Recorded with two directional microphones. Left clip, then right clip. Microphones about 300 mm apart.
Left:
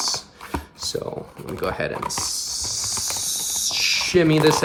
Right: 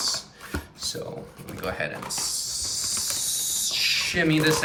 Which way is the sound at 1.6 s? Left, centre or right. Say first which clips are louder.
Left 4 dB; centre.